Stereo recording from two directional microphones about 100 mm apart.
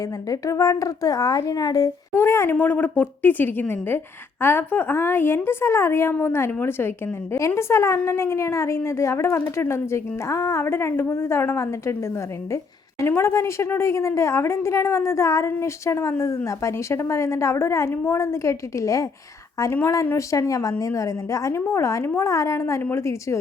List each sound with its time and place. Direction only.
0.3 s speech: 35° left (ahead or behind)
2.1 s a woman's voice: 25° left (ahead or behind)
13.1 s a woman's voice: 25° left (ahead or behind)